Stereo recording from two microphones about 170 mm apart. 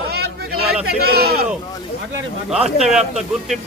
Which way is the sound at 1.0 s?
70° right (ahead or behind).